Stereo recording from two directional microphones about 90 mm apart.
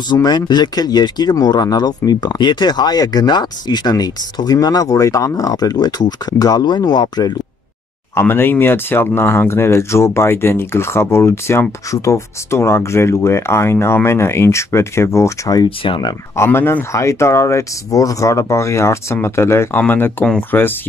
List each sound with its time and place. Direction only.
0.1 s speech: 50° left (ahead or behind)
8.1 s speech: 25° left (ahead or behind); by 15.7 s 45° left (ahead or behind)
15.8 s speech: 60° left (ahead or behind)
16.3 s speech: 25° left (ahead or behind)